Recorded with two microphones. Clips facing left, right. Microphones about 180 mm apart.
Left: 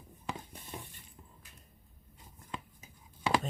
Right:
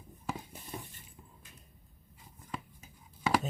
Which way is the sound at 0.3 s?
5° right (ahead or behind).